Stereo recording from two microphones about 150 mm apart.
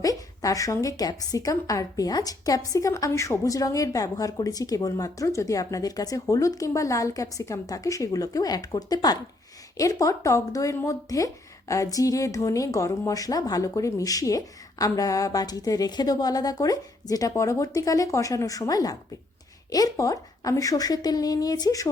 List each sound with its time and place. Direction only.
0.0 s a woman's voice: 25° left (ahead or behind)